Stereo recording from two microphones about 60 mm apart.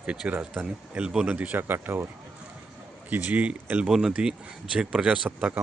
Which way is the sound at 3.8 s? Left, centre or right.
Centre.